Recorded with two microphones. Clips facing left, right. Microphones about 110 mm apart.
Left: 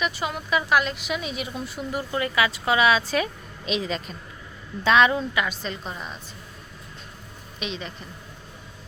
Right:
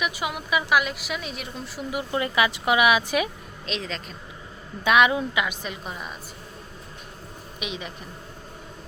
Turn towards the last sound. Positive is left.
turn(degrees=-10)  # may be behind; listen again after turning